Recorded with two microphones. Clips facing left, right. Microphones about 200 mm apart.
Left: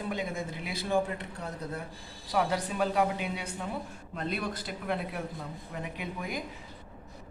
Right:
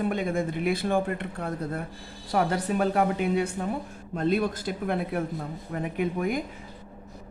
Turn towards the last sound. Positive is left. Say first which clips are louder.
# right 10 dB
turn(degrees=-50)  # may be behind; listen again after turning